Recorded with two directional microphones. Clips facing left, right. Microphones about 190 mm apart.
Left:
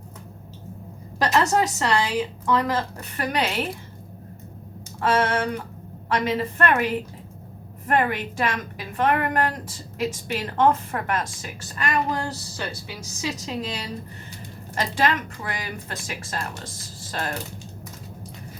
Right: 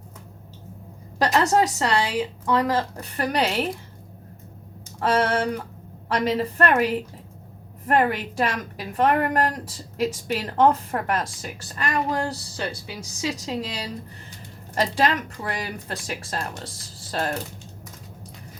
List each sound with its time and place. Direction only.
1.2 s a woman's voice: 35° right (ahead or behind)
4.9 s a woman's voice: 35° right (ahead or behind)